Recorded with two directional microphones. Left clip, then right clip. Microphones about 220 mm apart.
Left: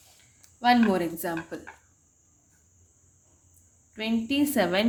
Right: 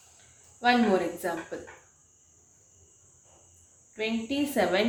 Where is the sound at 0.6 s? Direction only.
45° left (ahead or behind).